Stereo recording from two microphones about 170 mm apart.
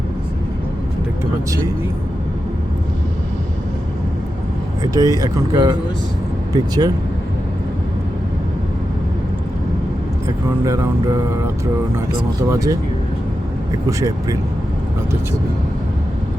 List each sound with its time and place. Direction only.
4.8 s speech: 20° right (ahead or behind)
10.2 s speech: 15° right (ahead or behind)
13.8 s speech: 20° right (ahead or behind)